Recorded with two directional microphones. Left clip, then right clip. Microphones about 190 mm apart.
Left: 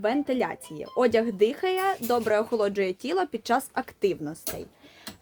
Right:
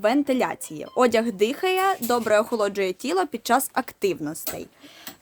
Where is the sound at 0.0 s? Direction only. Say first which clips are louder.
Right 4 dB; 30° right (ahead or behind).